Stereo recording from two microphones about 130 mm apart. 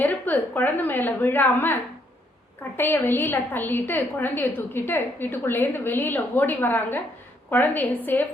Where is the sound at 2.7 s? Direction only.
15° left (ahead or behind).